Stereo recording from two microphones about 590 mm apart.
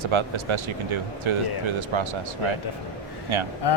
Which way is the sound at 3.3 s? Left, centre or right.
Right.